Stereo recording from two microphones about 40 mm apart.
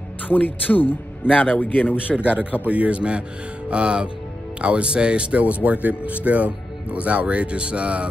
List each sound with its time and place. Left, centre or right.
0.3 s speech: left
2.1 s speech: right
5.4 s speech: right